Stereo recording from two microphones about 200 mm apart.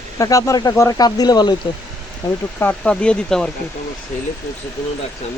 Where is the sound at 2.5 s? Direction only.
10° left (ahead or behind).